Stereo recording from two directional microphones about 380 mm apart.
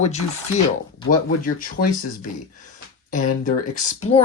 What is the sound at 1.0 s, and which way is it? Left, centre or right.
Speech, left.